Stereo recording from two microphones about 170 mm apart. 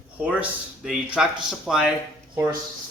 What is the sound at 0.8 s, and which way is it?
A man's voice, centre (ahead or behind).